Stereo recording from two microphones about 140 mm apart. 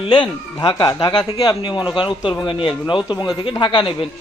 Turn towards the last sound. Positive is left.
turn(degrees=35)  # may be behind; listen again after turning